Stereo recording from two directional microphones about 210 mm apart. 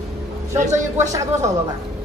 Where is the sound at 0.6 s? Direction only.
35° right (ahead or behind).